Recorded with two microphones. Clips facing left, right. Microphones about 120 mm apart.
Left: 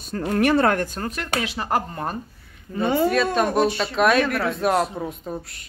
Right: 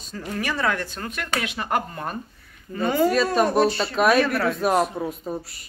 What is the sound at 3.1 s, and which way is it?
Speech, centre (ahead or behind).